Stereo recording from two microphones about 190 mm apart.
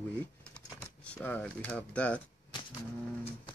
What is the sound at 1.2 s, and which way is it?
Speech, 5° left (ahead or behind).